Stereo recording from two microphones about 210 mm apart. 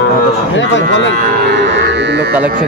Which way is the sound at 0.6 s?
60° left (ahead or behind).